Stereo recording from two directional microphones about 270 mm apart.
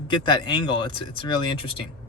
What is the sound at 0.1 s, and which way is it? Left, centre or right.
Speech, centre.